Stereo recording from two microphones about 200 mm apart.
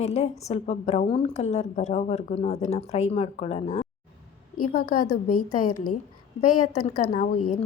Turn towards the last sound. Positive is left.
turn(degrees=40)  # may be behind; listen again after turning